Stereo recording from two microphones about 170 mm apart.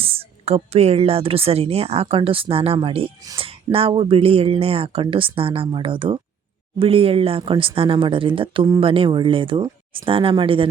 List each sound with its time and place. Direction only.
0.0 s speech: 35° right (ahead or behind)